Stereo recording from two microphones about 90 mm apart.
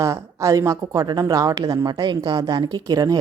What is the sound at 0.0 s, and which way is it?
Speech, 35° right (ahead or behind).